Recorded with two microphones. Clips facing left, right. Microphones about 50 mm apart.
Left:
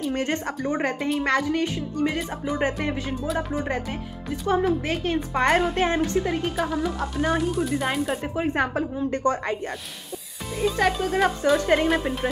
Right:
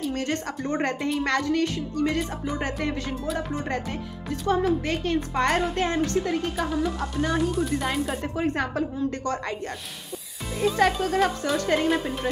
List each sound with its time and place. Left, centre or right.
0.1 s speech: left
0.7 s speech: centre
6.5 s speech: centre
8.5 s speech: left
10.6 s speech: centre